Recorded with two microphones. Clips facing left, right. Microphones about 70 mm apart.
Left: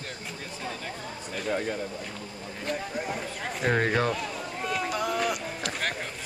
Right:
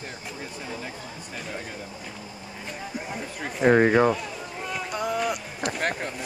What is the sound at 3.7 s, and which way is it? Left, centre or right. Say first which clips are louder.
Speech: right 7 dB; centre.